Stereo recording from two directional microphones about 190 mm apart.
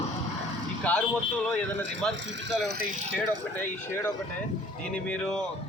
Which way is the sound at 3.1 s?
10° left (ahead or behind).